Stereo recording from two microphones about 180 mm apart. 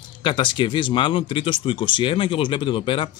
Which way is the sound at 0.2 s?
25° left (ahead or behind).